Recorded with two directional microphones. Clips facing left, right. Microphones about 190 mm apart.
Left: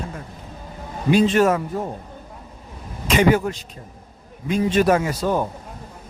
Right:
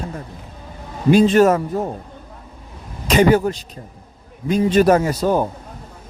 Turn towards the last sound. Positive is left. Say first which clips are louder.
# right 4 dB
turn(degrees=-40)  # may be behind; listen again after turning